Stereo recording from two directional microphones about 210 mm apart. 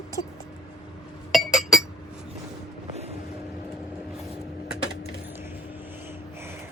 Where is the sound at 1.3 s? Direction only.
Centre (ahead or behind).